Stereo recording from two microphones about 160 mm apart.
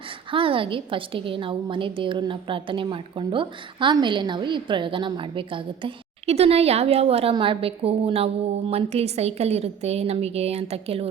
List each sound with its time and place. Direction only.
0.3 s a woman's voice: 35° right (ahead or behind)